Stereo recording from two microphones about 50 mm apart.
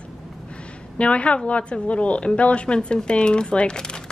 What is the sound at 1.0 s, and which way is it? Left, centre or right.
A woman's voice, left.